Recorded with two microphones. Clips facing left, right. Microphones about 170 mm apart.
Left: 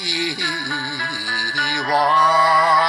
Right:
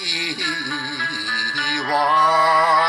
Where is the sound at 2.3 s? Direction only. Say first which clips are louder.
Left 1 dB; 20° right (ahead or behind).